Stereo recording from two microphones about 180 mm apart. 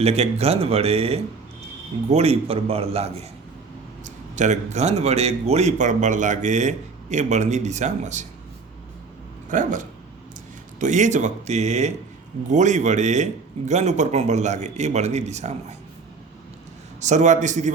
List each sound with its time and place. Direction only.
0.0 s speech: 35° right (ahead or behind)
9.5 s speech: 45° right (ahead or behind)
17.0 s speech: 40° right (ahead or behind)